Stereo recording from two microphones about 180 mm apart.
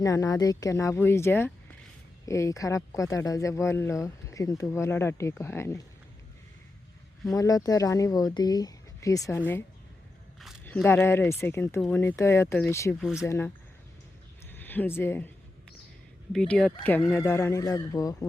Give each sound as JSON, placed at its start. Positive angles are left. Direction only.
{"t": 0.0, "sound": "speech", "side_deg": 20}
{"t": 7.3, "sound": "speech", "side_deg": 20}
{"t": 10.8, "sound": "speech", "side_deg": 10}
{"t": 13.0, "sound": "speech", "side_deg": -5}
{"t": 13.2, "sound": "speech", "side_deg": 15}
{"t": 14.5, "sound": "speech", "side_deg": 10}
{"t": 16.3, "sound": "speech", "side_deg": 5}